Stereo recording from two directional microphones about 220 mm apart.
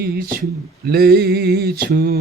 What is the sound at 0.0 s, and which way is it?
Speech, 40° right (ahead or behind).